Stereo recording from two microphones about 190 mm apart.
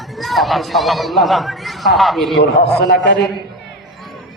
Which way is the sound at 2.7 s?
60° left (ahead or behind).